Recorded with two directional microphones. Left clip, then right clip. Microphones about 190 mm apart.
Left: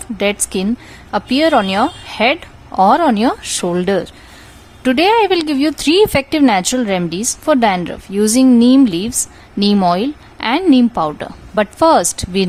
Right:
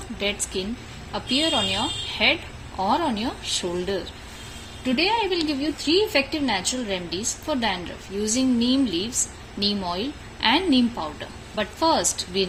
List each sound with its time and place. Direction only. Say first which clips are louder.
0.2 s a woman's voice: left 10 dB; 50° left (ahead or behind)